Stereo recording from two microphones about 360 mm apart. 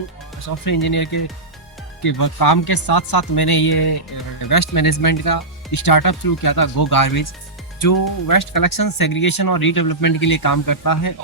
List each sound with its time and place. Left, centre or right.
0.6 s speech: left
2.0 s speech: left
4.4 s speech: left
6.8 s speech: left